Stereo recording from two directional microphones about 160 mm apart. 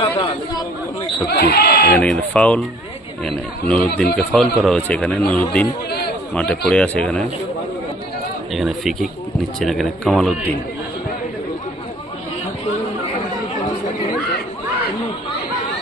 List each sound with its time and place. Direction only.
1.3 s speech: 75° left (ahead or behind)
2.0 s a man's voice: 5° left (ahead or behind)
8.5 s speech: centre (ahead or behind)